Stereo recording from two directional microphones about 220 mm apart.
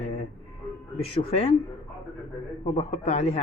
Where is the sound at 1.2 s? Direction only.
25° left (ahead or behind).